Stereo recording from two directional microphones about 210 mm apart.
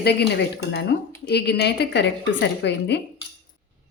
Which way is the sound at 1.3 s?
50° left (ahead or behind).